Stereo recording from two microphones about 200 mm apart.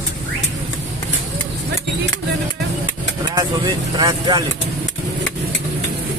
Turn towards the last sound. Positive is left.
turn(degrees=-20)  # may be behind; listen again after turning